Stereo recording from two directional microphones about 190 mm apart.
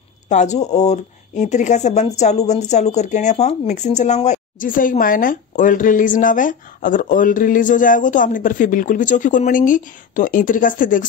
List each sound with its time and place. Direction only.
0.3 s speech: 40° left (ahead or behind)